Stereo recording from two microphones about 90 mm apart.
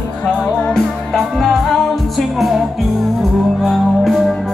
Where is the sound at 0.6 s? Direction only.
15° left (ahead or behind).